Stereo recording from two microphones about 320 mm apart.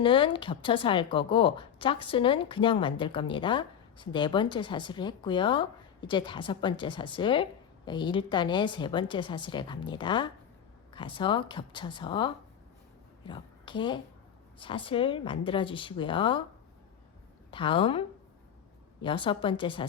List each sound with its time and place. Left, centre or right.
0.0 s a woman's voice: centre
17.5 s a woman's voice: centre
19.0 s a woman's voice: centre